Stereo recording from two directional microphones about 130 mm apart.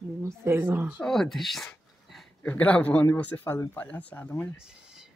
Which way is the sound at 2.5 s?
10° left (ahead or behind).